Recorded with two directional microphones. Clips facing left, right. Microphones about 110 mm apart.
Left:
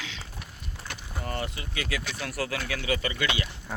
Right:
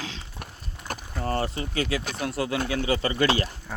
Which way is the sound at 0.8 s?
40° right (ahead or behind).